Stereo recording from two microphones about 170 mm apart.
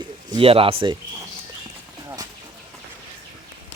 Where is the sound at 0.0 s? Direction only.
30° right (ahead or behind).